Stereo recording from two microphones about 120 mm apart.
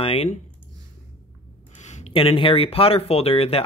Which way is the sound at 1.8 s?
75° left (ahead or behind).